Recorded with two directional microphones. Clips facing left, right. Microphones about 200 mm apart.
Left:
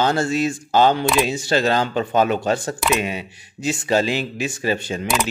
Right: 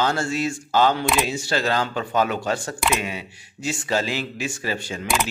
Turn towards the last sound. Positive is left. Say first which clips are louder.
# left 6 dB
turn(degrees=20)  # may be behind; listen again after turning